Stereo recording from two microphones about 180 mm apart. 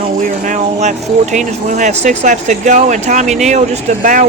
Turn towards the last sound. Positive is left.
turn(degrees=-45)  # may be behind; listen again after turning